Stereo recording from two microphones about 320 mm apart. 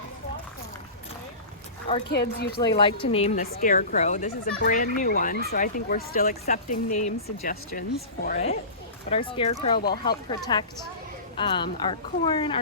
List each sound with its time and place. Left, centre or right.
2.0 s speech: left
2.7 s speech: centre